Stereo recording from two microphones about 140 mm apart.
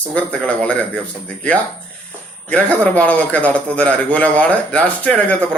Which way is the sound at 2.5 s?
10° left (ahead or behind).